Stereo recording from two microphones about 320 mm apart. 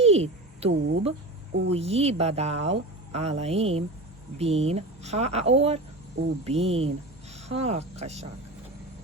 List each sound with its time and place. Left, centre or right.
0.0 s a sound: centre
0.7 s speech: right
1.7 s speech: centre